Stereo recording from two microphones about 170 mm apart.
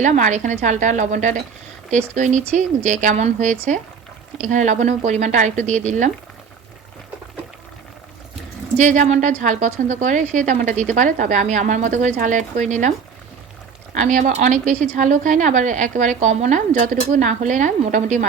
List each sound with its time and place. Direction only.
0.0 s speech: 45° right (ahead or behind)
8.8 s speech: 45° right (ahead or behind)
13.9 s speech: 50° right (ahead or behind)